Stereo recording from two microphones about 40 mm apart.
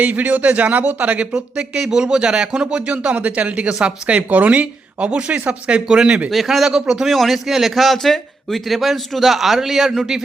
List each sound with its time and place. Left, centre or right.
0.0 s speech: right
1.3 s speech: right
2.8 s speech: right
6.3 s speech: centre
7.1 s a man's voice: centre